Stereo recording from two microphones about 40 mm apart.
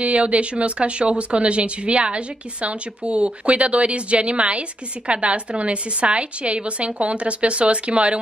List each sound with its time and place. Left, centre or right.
0.0 s speech: right